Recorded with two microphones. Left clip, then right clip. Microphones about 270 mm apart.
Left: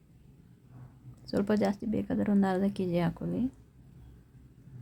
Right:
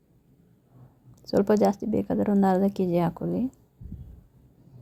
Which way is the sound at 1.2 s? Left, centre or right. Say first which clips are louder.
Right 8 dB; centre.